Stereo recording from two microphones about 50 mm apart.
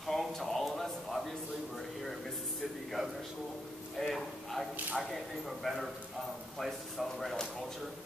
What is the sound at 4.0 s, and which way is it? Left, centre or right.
Speech, centre.